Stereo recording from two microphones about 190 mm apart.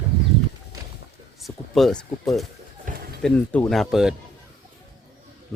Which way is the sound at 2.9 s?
45° right (ahead or behind).